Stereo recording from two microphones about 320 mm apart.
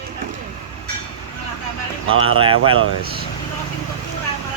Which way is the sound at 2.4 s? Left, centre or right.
Centre.